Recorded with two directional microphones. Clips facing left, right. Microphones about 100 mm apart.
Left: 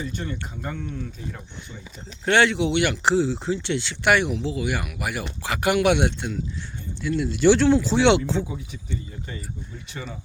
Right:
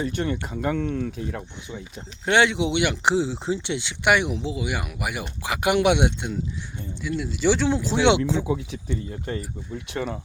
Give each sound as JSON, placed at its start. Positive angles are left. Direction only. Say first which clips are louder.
{"t": 0.0, "sound": "speech", "louder": "right 5 dB", "side_deg": -65}
{"t": 2.2, "sound": "speech", "louder": "left 1 dB", "side_deg": -15}
{"t": 7.0, "sound": "speech", "louder": "left 4 dB", "side_deg": -5}
{"t": 8.4, "sound": "speech", "louder": "right 7 dB", "side_deg": -90}